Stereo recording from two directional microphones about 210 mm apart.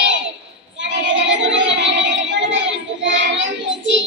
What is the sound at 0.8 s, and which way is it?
Music, 60° right (ahead or behind).